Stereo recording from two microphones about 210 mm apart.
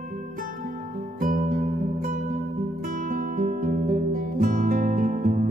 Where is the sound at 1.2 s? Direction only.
40° right (ahead or behind).